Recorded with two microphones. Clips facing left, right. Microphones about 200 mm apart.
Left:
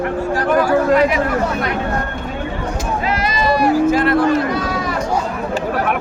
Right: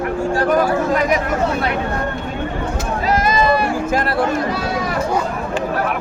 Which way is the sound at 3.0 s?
45° right (ahead or behind).